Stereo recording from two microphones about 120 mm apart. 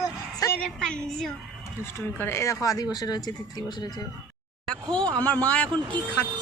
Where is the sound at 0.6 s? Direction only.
5° left (ahead or behind).